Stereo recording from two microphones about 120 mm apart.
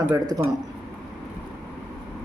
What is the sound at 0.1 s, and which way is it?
Speech, 30° right (ahead or behind).